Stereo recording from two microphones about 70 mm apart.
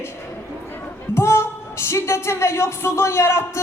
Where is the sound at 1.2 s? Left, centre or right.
Left.